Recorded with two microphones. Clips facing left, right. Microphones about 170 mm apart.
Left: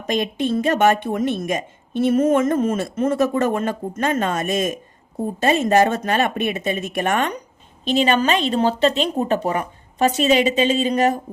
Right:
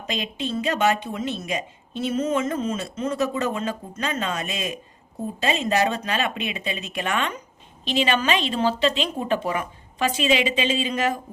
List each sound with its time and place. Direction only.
0.1 s speech: 50° left (ahead or behind)